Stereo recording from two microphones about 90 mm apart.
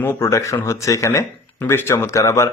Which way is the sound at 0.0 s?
25° left (ahead or behind).